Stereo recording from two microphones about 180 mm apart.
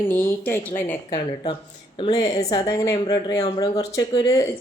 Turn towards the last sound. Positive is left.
turn(degrees=20)  # may be behind; listen again after turning